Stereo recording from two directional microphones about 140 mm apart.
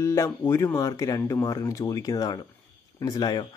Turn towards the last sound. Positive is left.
turn(degrees=25)  # may be behind; listen again after turning